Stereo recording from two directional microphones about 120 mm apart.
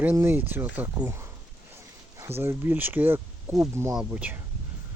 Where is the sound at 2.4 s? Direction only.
20° right (ahead or behind).